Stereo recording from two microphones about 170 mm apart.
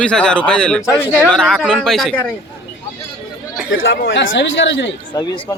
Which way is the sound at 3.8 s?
90° left.